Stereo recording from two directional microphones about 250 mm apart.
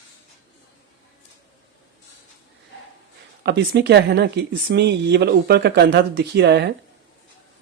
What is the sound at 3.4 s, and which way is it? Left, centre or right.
Speech, right.